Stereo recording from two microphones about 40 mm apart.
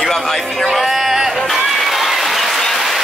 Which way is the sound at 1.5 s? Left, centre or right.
Centre.